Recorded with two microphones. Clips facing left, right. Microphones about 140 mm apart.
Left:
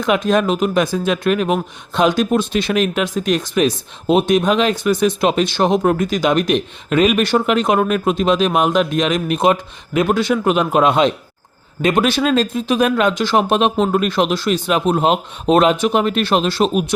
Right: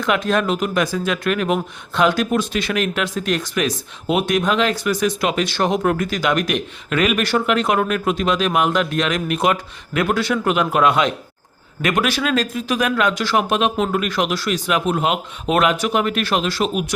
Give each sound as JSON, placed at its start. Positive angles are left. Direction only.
{"t": 0.0, "sound": "speech", "side_deg": 20}